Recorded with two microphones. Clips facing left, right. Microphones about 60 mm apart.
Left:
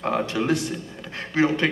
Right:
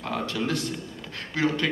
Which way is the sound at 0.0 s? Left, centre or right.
Left.